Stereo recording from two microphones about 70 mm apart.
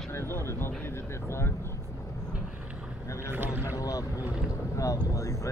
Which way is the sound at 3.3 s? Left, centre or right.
Right.